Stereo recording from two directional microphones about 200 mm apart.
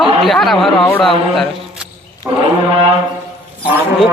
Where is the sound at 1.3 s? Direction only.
5° right (ahead or behind).